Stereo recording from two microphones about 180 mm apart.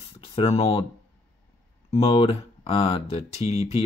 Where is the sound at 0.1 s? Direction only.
35° left (ahead or behind).